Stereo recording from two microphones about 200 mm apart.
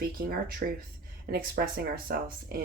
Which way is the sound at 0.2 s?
50° right (ahead or behind).